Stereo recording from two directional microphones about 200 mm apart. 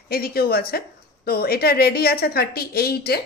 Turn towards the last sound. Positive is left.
turn(degrees=50)  # may be behind; listen again after turning